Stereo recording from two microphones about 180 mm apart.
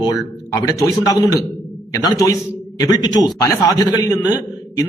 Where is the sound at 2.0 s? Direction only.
20° left (ahead or behind).